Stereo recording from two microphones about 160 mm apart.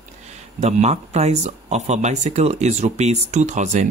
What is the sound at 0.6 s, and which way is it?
Speech, 45° right (ahead or behind).